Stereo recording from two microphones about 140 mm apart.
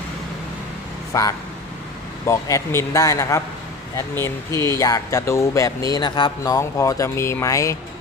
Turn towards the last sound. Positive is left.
turn(degrees=20)  # may be behind; listen again after turning